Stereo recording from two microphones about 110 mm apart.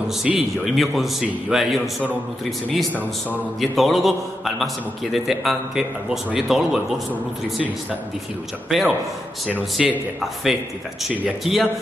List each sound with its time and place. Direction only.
0.3 s a man's voice: 5° right (ahead or behind)
3.7 s a man's voice: centre (ahead or behind)
5.1 s a man's voice: centre (ahead or behind)
8.6 s a man's voice: 5° right (ahead or behind)